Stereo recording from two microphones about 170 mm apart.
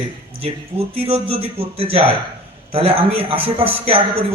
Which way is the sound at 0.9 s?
35° right (ahead or behind).